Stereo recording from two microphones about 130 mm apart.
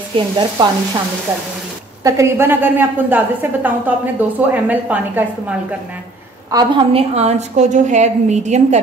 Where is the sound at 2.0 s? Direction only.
20° right (ahead or behind).